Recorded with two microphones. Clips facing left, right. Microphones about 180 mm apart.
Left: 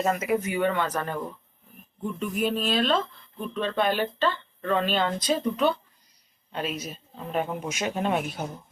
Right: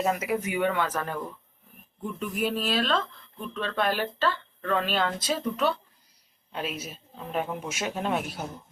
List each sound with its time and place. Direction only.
0.0 s speech: 5° right (ahead or behind)